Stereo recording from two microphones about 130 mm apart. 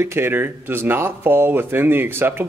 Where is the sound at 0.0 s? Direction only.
20° right (ahead or behind).